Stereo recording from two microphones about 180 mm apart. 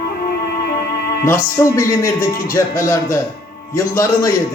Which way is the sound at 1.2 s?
15° left (ahead or behind).